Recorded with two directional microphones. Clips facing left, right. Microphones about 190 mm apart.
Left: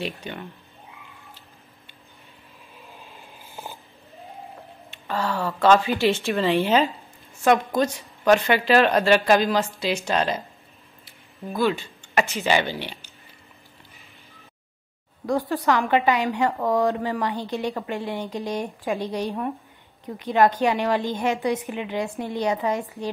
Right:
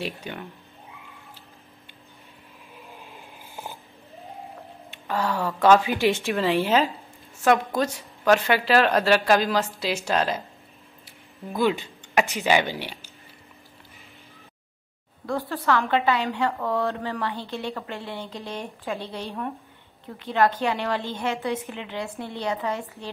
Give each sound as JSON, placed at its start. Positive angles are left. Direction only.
{"t": 0.0, "sound": "a woman's voice", "side_deg": -5}
{"t": 4.9, "sound": "a woman's voice", "side_deg": -10}
{"t": 11.1, "sound": "speech", "side_deg": -15}
{"t": 15.2, "sound": "a woman's voice", "side_deg": 15}